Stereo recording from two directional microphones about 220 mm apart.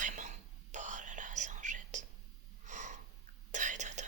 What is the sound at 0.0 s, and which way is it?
Whispering, 35° right (ahead or behind).